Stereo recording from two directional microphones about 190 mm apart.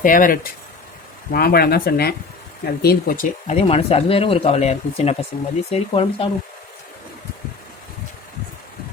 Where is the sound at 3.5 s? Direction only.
35° left (ahead or behind).